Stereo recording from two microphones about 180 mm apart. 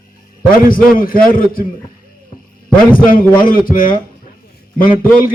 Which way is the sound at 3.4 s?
50° left (ahead or behind).